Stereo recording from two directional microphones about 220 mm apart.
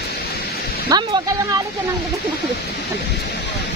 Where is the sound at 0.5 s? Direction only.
45° left (ahead or behind).